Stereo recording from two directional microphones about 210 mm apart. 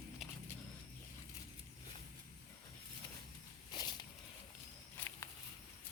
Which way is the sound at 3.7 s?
20° left (ahead or behind).